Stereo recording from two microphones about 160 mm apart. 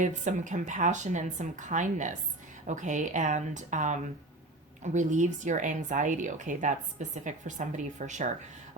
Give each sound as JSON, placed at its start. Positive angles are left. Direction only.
{"t": 0.0, "sound": "speech", "side_deg": -50}